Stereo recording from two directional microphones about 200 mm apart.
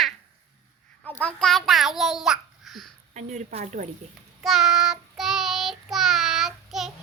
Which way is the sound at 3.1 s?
35° right (ahead or behind).